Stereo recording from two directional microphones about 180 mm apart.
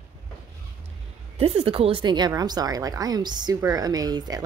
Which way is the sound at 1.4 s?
35° right (ahead or behind).